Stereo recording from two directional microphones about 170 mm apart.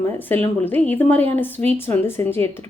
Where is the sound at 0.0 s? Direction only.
15° left (ahead or behind).